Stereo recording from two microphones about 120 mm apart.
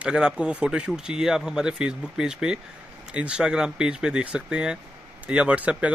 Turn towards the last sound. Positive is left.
turn(degrees=-10)  # may be behind; listen again after turning